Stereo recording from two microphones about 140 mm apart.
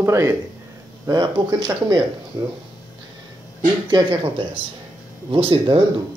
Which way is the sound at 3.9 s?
35° right (ahead or behind).